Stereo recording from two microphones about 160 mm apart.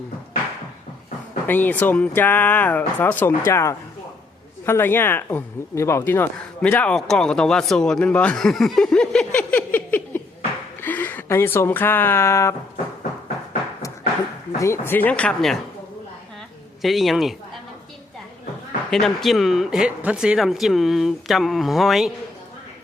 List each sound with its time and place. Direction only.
1.5 s speech: 10° left (ahead or behind)
12.7 s a sound: 50° left (ahead or behind)
14.6 s speech: 15° left (ahead or behind)
16.8 s speech: centre (ahead or behind)
19.0 s speech: centre (ahead or behind)